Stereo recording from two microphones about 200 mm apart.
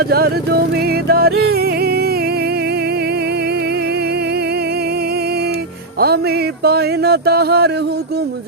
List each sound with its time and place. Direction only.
0.1 s speech: 50° right (ahead or behind)
1.0 s music: 50° right (ahead or behind)
6.7 s speech: 55° right (ahead or behind)